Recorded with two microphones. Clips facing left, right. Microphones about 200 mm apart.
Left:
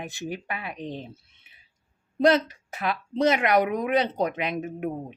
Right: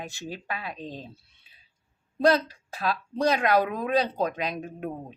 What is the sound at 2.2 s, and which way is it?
Speech, 20° left (ahead or behind).